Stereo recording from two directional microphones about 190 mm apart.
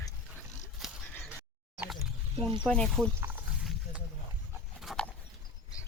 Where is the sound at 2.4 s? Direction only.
30° right (ahead or behind).